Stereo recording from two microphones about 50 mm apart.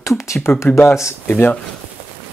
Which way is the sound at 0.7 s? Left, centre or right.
Left.